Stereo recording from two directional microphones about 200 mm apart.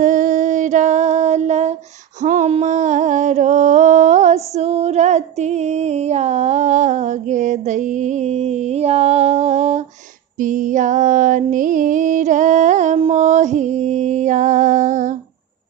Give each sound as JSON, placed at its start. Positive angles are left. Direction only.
{"t": 0.0, "sound": "female singing", "side_deg": -40}
{"t": 2.2, "sound": "a sound", "side_deg": -35}
{"t": 10.4, "sound": "music", "side_deg": -40}